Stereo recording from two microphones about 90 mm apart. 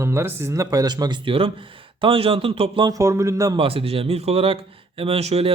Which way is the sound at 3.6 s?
90° right.